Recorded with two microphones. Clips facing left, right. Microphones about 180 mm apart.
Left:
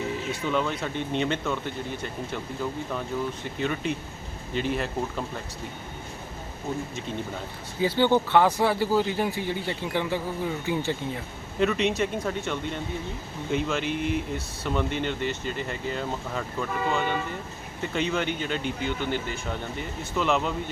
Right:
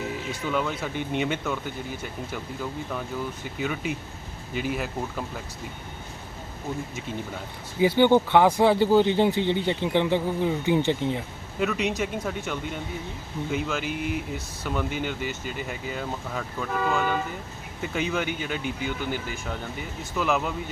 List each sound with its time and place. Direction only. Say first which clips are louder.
0.3 s speech: even; 5° right (ahead or behind)
3.6 s speech: left 1 dB; 5° right (ahead or behind)
7.8 s speech: right 3 dB; 15° right (ahead or behind)
11.6 s speech: left 2 dB; centre (ahead or behind)